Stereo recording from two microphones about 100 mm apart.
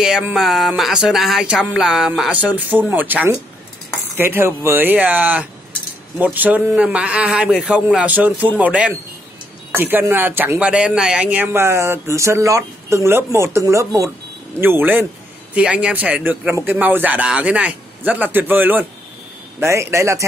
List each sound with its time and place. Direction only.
0.0 s a man's voice: 5° right (ahead or behind); by 20.2 s 30° right (ahead or behind)